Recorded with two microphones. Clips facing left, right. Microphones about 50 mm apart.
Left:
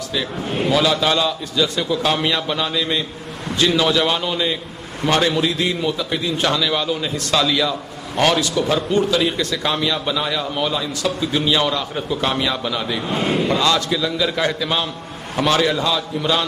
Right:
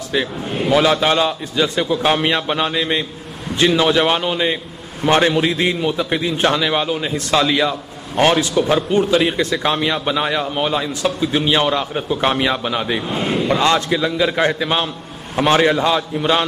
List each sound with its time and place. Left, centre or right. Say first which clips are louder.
0.1 s a man's voice: right 3 dB; right
13.1 s speech: left 3 dB; centre
13.6 s a man's voice: right 2 dB; right